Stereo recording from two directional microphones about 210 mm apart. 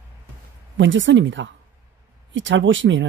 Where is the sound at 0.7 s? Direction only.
60° right (ahead or behind).